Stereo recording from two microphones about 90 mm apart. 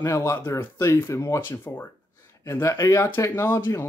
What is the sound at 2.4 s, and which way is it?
Speech, 35° left (ahead or behind).